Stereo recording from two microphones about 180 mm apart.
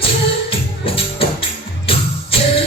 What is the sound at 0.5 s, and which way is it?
Music, 30° left (ahead or behind).